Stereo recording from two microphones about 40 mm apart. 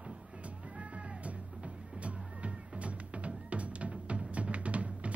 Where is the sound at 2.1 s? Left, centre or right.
Right.